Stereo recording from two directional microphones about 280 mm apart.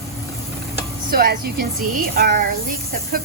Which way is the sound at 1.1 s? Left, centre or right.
Right.